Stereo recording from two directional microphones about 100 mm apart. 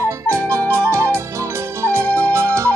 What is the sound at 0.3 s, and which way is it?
Flute, 25° right (ahead or behind).